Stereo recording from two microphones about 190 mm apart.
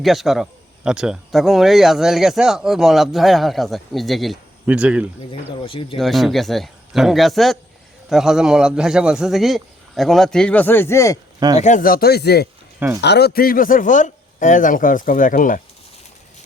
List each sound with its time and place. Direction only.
0.0 s speech: centre (ahead or behind)
5.3 s speech: 30° left (ahead or behind)
6.0 s speech: centre (ahead or behind)
11.5 s speech: 40° left (ahead or behind)